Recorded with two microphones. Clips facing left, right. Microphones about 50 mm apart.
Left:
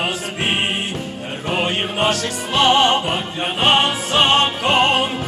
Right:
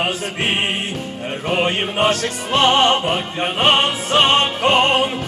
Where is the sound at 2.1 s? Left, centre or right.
Right.